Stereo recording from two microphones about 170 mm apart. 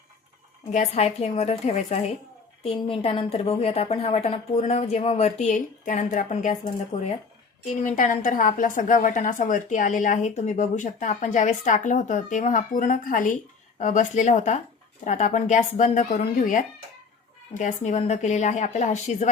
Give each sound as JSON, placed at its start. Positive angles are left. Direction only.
{"t": 0.7, "sound": "a woman's voice", "side_deg": 40}